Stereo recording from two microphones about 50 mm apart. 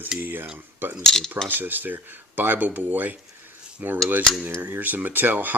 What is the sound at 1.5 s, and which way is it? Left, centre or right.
Speech, right.